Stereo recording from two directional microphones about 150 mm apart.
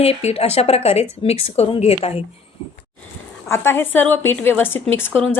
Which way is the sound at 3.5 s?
15° left (ahead or behind).